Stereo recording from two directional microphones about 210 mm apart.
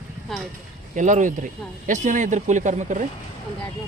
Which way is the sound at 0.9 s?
35° right (ahead or behind).